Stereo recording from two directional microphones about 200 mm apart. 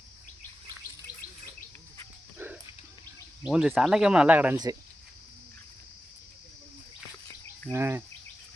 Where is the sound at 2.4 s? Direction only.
10° right (ahead or behind).